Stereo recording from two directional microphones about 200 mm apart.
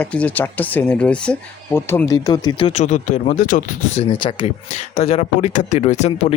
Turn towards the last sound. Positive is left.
turn(degrees=35)  # may be behind; listen again after turning